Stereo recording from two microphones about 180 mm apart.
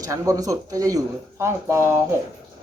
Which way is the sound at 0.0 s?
20° right (ahead or behind).